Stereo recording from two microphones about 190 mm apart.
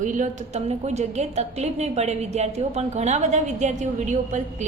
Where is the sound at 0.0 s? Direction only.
40° right (ahead or behind).